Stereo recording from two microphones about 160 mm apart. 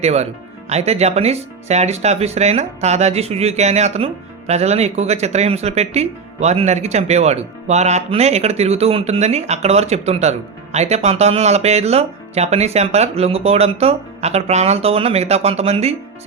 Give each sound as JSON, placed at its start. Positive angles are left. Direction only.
{"t": 0.0, "sound": "speech", "side_deg": -40}